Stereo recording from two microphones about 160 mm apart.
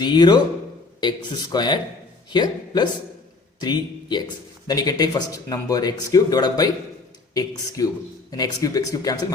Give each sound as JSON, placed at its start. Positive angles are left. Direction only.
{"t": 0.0, "sound": "speech", "side_deg": 25}
{"t": 7.8, "sound": "speech", "side_deg": 20}